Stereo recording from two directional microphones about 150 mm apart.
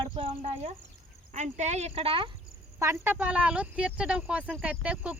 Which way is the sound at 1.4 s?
50° right (ahead or behind).